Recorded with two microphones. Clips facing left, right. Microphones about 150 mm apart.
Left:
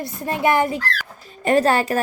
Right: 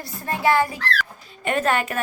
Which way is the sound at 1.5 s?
35° left (ahead or behind).